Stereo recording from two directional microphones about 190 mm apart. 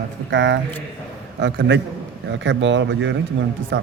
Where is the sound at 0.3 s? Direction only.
70° right (ahead or behind).